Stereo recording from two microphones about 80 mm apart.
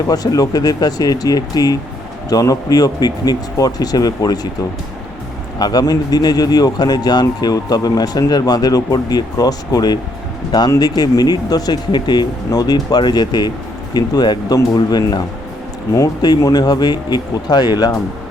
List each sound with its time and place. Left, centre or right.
0.1 s speech: left
5.5 s speech: left
12.5 s speech: left